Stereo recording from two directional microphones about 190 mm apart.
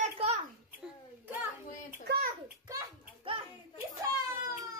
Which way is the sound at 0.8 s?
10° right (ahead or behind).